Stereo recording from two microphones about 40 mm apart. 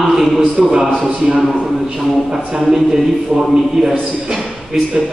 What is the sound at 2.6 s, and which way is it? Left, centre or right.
Speech, centre.